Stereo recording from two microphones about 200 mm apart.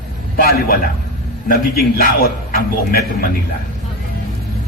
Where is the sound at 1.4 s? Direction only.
50° left (ahead or behind).